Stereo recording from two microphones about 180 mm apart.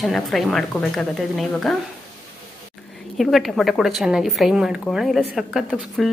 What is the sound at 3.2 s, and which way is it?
A woman's voice, centre (ahead or behind).